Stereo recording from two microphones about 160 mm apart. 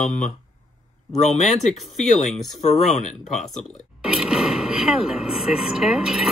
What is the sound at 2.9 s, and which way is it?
Speech, 45° left (ahead or behind).